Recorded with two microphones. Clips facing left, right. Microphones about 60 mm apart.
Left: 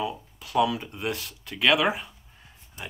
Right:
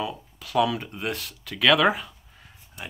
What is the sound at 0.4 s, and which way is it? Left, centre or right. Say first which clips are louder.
Speech: right 1 dB; right.